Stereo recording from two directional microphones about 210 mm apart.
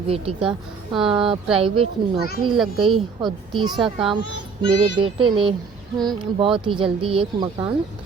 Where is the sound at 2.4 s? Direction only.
Centre (ahead or behind).